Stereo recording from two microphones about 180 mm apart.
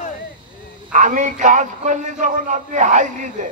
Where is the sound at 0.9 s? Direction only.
45° right (ahead or behind).